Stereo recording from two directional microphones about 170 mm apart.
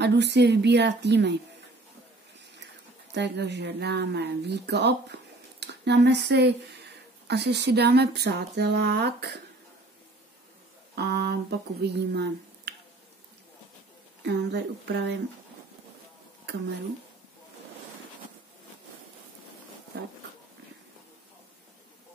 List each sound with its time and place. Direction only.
0.0 s speech: 90° right
3.1 s speech: 90° right
11.0 s speech: 75° right (ahead or behind)
14.2 s speech: 75° right (ahead or behind)